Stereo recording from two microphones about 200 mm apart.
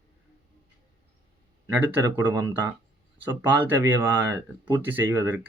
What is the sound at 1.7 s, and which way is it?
Speech, 10° right (ahead or behind).